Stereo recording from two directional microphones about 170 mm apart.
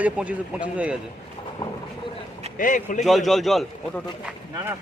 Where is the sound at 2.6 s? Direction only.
50° left (ahead or behind).